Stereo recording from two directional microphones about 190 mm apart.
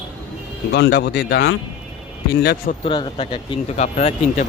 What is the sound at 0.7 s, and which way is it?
Speech, 65° left (ahead or behind).